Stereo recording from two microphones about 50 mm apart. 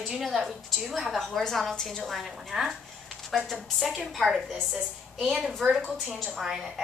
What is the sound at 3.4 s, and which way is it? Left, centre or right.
A woman's voice, centre.